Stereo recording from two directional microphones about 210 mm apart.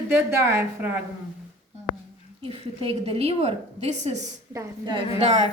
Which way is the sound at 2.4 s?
25° right (ahead or behind).